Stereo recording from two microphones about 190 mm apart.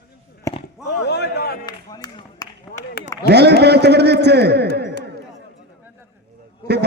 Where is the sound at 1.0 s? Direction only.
60° left (ahead or behind).